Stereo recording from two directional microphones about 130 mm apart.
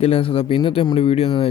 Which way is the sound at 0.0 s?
45° left (ahead or behind).